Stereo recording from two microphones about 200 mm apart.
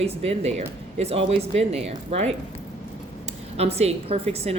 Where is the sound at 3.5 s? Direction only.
30° right (ahead or behind).